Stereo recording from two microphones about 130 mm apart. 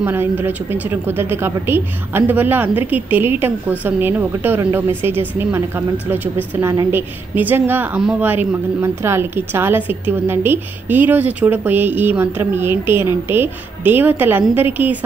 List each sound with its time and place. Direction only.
0.0 s speech: 15° right (ahead or behind)